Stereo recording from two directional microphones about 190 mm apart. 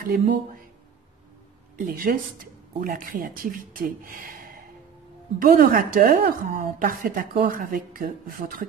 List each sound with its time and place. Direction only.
0.0 s a woman's voice: 45° right (ahead or behind)
1.8 s a woman's voice: 45° right (ahead or behind)